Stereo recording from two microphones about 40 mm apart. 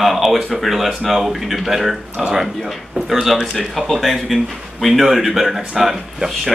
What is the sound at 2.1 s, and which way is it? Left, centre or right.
Speech, right.